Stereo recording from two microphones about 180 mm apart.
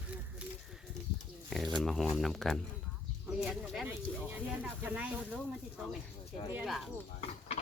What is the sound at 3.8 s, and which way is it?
Speech, 10° right (ahead or behind).